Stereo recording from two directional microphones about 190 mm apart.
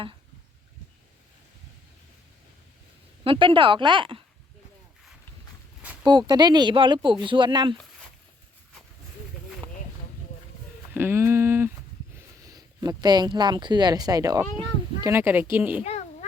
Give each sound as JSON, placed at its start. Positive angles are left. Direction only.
{"t": 3.2, "sound": "speech", "side_deg": -25}
{"t": 5.8, "sound": "a sound", "side_deg": -10}
{"t": 6.1, "sound": "speech", "side_deg": -25}
{"t": 10.9, "sound": "speech", "side_deg": -10}